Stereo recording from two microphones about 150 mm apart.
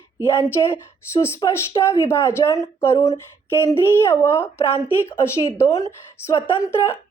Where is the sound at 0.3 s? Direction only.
15° left (ahead or behind).